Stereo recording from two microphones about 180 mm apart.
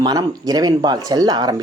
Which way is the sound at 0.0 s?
20° right (ahead or behind).